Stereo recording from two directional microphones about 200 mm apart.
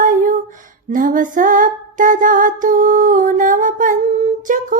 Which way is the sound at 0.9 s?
40° right (ahead or behind).